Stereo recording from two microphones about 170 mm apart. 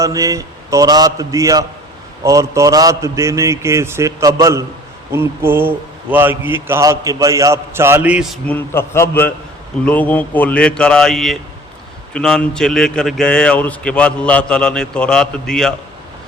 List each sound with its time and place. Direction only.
0.0 s a man's voice: 20° right (ahead or behind)
8.4 s a man's voice: 10° left (ahead or behind)